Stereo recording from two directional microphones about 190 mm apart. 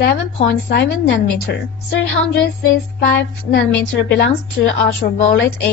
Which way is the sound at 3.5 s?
65° left (ahead or behind).